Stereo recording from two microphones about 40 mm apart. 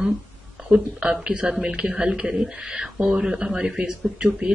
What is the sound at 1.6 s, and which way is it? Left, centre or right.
Speech, right.